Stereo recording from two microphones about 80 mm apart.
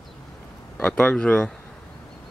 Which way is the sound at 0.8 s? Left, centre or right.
Centre.